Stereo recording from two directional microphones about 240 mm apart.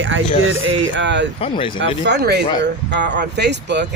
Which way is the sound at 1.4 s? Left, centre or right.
Left.